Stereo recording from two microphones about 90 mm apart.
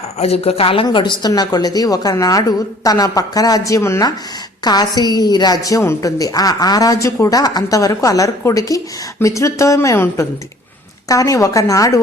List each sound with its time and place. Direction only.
0.4 s speech: 90° left
0.9 s a woman's voice: 60° left (ahead or behind)
1.3 s a woman's voice: 50° left (ahead or behind)
4.6 s a woman's voice: 45° left (ahead or behind)